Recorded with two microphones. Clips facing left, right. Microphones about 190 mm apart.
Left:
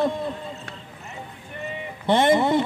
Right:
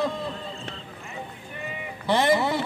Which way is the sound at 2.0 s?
20° left (ahead or behind).